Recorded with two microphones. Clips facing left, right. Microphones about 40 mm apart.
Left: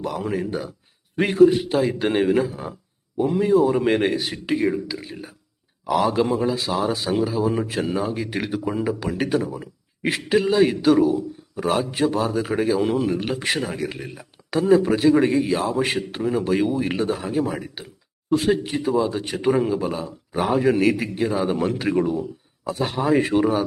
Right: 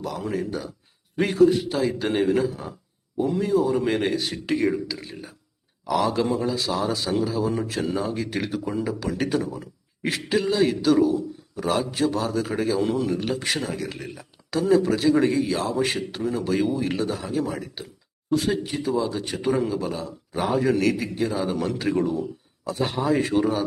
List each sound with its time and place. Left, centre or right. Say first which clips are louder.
0.0 s a man's voice: left 3 dB; left
4.2 s a man's voice: left 1 dB; centre
18.3 s a man's voice: left 3 dB; left